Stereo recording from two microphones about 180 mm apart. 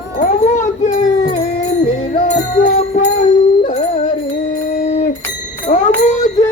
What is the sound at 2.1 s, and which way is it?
Music, 45° left (ahead or behind).